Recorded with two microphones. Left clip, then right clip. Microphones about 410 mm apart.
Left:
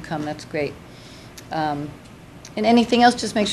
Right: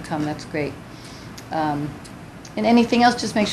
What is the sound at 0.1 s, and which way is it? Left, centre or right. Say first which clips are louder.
Speech: right 1 dB; left.